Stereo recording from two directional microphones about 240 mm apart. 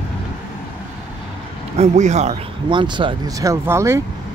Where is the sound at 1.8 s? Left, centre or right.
Right.